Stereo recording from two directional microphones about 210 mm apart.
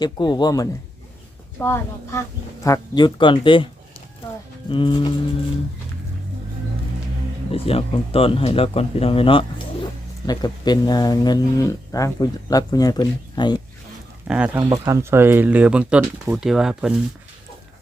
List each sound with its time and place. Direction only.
0.0 s a woman's voice: 20° left (ahead or behind)
4.7 s speech: 20° left (ahead or behind)
7.5 s speech: 25° left (ahead or behind)
14.3 s speech: 5° right (ahead or behind)
14.6 s speech: 15° right (ahead or behind)